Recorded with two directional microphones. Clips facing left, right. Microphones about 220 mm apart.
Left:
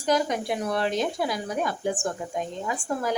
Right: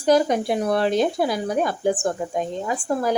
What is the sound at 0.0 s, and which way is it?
Speech, 35° right (ahead or behind).